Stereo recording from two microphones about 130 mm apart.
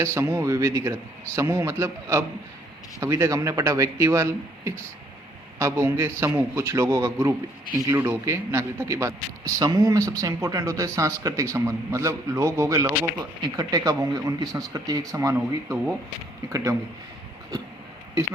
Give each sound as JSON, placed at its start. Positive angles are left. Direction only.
{"t": 0.0, "sound": "speech", "side_deg": -20}